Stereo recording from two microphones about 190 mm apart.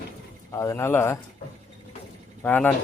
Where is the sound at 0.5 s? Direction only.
15° left (ahead or behind).